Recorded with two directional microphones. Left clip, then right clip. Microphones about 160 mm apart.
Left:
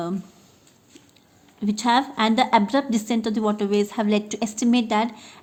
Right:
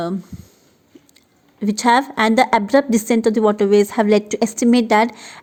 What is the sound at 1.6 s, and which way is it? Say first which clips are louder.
A woman's voice: right 5 dB; 45° right (ahead or behind).